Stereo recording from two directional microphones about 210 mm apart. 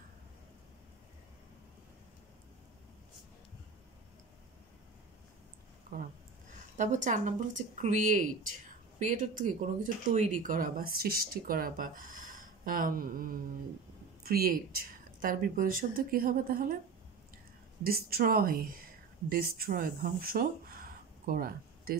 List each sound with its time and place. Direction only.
5.9 s a sound: 45° right (ahead or behind)
6.8 s speech: 35° right (ahead or behind)
17.8 s speech: 45° right (ahead or behind)